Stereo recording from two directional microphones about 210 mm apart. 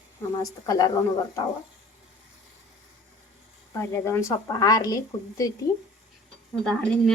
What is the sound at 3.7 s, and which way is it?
A woman's voice, 15° left (ahead or behind).